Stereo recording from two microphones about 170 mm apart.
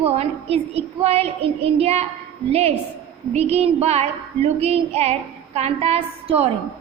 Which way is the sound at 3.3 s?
35° right (ahead or behind).